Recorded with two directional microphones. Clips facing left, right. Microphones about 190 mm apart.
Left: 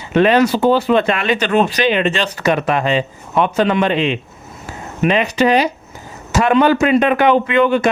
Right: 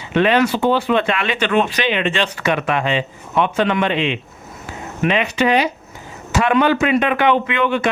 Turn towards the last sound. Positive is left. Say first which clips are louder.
# left 5 dB
turn(degrees=40)  # may be behind; listen again after turning